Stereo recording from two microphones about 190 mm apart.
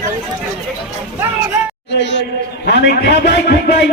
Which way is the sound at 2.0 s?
65° left (ahead or behind).